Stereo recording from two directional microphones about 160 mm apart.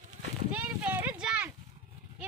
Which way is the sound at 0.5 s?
10° right (ahead or behind).